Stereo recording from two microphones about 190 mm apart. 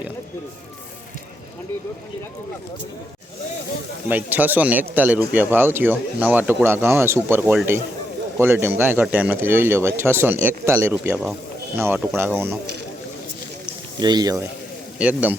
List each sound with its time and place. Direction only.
4.1 s speech: 10° right (ahead or behind)
14.0 s speech: 20° right (ahead or behind)
14.9 s speech: 5° right (ahead or behind)